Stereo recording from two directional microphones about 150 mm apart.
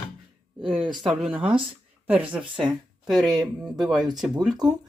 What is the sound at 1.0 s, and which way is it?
Speech, 5° right (ahead or behind).